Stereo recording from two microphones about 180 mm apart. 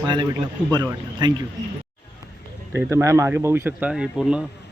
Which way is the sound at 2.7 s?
15° right (ahead or behind).